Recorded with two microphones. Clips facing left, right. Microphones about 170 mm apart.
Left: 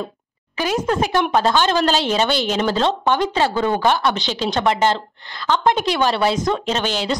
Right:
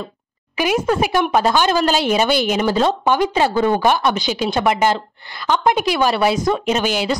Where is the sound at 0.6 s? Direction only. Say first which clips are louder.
Right 2 dB; 10° right (ahead or behind).